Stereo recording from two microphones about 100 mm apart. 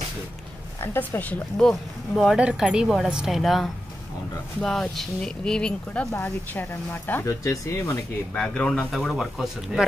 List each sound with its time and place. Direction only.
0.7 s speech: 20° left (ahead or behind)
1.6 s speech: centre (ahead or behind)
6.1 s speech: 20° left (ahead or behind)
7.2 s speech: 30° left (ahead or behind)
8.3 s speech: 10° left (ahead or behind); by 9.8 s 5° right (ahead or behind)